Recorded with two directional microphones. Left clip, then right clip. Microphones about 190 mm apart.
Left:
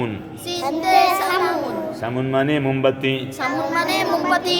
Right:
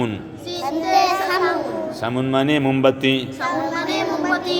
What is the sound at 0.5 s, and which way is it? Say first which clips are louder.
Child singing: left 2 dB; 55° left (ahead or behind).